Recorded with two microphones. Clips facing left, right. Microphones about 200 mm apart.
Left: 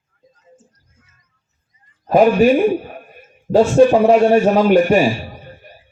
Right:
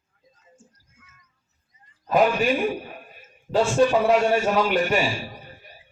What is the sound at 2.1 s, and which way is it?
A man's voice, 45° left (ahead or behind).